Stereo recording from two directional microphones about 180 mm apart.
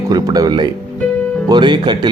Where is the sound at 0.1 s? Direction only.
20° right (ahead or behind).